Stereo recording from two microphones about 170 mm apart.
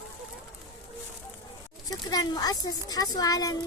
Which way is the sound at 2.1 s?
25° left (ahead or behind).